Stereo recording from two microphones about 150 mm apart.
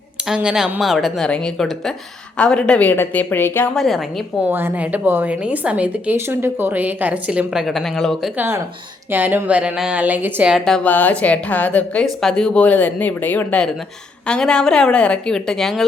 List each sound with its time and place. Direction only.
0.3 s a woman's voice: 5° right (ahead or behind); by 3.7 s 15° left (ahead or behind)
3.8 s a woman's voice: centre (ahead or behind)
4.4 s a woman's voice: 15° right (ahead or behind)
8.4 s a woman's voice: 15° right (ahead or behind)
10.7 s a woman's voice: 10° left (ahead or behind)